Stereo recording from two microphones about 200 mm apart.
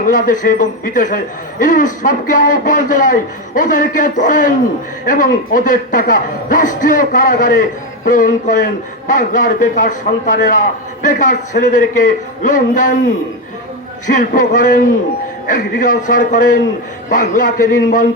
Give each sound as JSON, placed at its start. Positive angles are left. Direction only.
{"t": 0.1, "sound": "a man's voice", "side_deg": 40}
{"t": 14.1, "sound": "a man's voice", "side_deg": 40}